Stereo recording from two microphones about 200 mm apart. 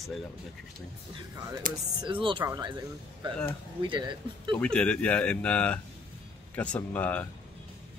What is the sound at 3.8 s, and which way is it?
Speech, 25° right (ahead or behind).